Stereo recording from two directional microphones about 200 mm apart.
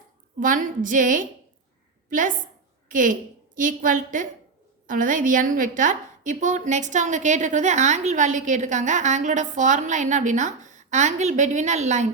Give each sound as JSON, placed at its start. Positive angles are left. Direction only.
{"t": 0.3, "sound": "a woman's voice", "side_deg": -40}